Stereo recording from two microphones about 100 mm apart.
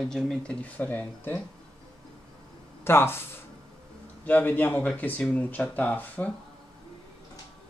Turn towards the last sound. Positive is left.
turn(degrees=15)  # may be behind; listen again after turning